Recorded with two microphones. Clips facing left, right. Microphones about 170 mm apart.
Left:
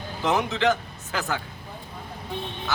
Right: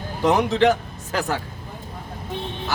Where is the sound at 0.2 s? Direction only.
35° right (ahead or behind).